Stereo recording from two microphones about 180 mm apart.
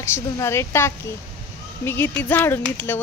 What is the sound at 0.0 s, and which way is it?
Speech, 15° left (ahead or behind).